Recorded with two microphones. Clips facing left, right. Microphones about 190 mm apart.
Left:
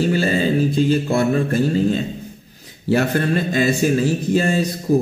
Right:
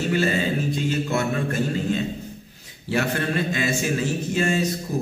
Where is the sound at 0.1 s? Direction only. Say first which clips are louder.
Left 4 dB; 35° left (ahead or behind).